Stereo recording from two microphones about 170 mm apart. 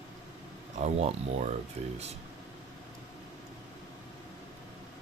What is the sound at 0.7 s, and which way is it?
Speech, 40° right (ahead or behind).